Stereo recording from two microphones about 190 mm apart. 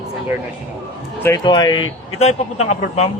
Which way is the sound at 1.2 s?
20° left (ahead or behind).